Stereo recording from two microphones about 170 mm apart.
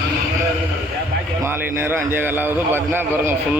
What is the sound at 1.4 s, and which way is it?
A man's voice, 10° right (ahead or behind).